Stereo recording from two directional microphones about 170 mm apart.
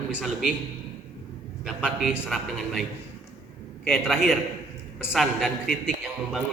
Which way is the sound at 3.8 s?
Centre (ahead or behind).